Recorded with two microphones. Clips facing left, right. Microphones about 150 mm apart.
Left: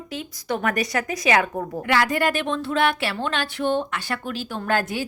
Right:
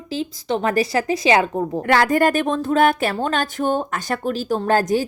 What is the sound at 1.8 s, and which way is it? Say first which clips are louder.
Speech: right 5 dB; 45° right (ahead or behind).